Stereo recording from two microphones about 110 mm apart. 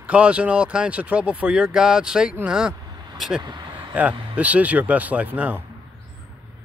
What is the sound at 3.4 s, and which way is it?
Speech, 40° right (ahead or behind).